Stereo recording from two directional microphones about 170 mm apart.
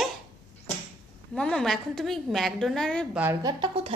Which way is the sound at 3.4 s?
30° right (ahead or behind).